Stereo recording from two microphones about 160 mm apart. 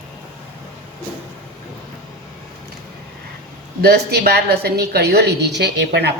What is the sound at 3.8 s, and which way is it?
A woman's voice, 80° right.